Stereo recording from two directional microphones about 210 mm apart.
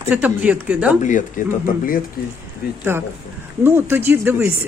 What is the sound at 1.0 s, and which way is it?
Speech, 35° left (ahead or behind).